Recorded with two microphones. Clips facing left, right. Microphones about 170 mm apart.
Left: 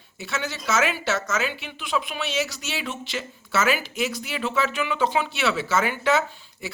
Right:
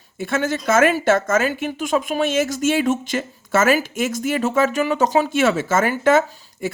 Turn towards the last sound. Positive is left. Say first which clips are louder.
# right 9 dB
turn(degrees=-50)  # may be behind; listen again after turning